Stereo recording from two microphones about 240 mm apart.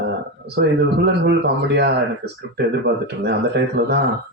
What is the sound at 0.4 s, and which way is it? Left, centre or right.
A man's voice, right.